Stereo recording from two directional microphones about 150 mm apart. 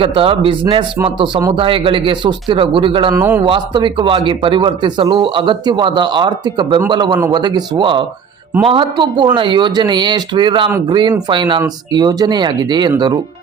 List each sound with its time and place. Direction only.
0.0 s speech: 35° right (ahead or behind)
3.1 s a man's voice: 15° right (ahead or behind)
3.4 s speech: 35° right (ahead or behind)